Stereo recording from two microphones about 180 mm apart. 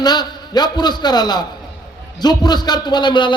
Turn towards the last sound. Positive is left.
turn(degrees=25)  # may be behind; listen again after turning